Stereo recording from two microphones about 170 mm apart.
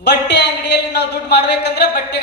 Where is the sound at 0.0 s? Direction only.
85° left.